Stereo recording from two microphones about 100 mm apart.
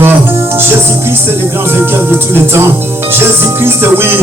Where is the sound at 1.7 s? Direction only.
25° right (ahead or behind).